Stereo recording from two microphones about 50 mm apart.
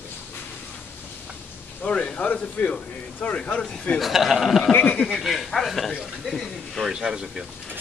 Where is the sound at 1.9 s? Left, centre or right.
Centre.